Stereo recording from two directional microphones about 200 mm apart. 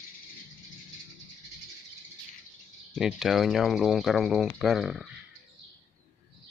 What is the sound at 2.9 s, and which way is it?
Speech, centre (ahead or behind).